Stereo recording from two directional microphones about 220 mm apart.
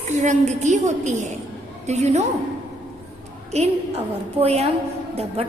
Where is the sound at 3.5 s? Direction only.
30° right (ahead or behind).